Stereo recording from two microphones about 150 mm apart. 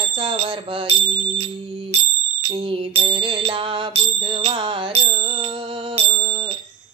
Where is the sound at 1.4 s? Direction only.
40° right (ahead or behind).